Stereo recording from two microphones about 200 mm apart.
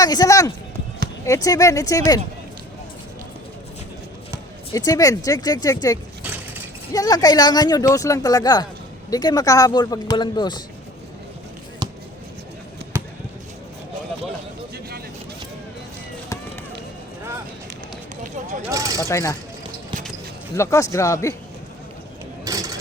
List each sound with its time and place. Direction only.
0.0 s speech: 20° left (ahead or behind)
4.7 s speech: 20° left (ahead or behind)
6.9 s speech: 20° left (ahead or behind)
11.8 s basketball bounce: 20° right (ahead or behind)
18.2 s a sound: 40° right (ahead or behind)
18.7 s vehicle: 15° right (ahead or behind)
19.0 s speech: 15° left (ahead or behind)
20.6 s speech: 15° left (ahead or behind)
22.4 s a sound: 15° right (ahead or behind)